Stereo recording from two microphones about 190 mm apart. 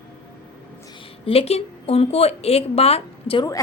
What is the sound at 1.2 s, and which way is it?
Speech, 30° left (ahead or behind).